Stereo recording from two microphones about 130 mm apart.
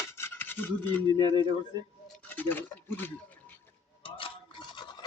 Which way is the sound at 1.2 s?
35° right (ahead or behind).